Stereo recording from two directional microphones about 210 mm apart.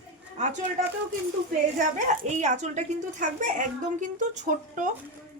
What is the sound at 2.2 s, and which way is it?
A woman's voice, 35° right (ahead or behind).